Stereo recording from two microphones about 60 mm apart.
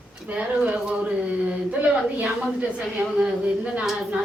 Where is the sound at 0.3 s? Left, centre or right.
Right.